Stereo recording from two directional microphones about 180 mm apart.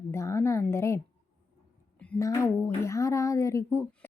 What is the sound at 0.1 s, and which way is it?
Speech, 15° left (ahead or behind).